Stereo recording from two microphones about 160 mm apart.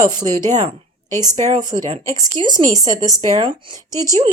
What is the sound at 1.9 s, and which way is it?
Speech, 40° right (ahead or behind).